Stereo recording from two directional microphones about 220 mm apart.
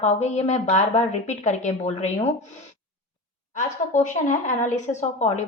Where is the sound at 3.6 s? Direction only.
35° left (ahead or behind).